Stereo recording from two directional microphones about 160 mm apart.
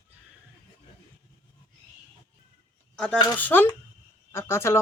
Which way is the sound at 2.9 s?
5° left (ahead or behind).